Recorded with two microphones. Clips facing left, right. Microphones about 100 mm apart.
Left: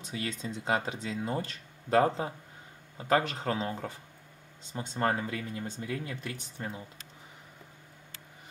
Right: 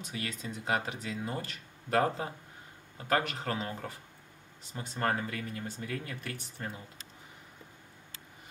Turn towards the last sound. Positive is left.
turn(degrees=20)  # may be behind; listen again after turning